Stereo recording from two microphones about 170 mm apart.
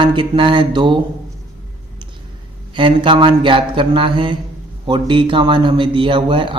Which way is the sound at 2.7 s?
30° right (ahead or behind).